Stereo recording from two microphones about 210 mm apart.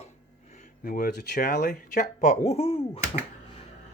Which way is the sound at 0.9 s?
45° left (ahead or behind).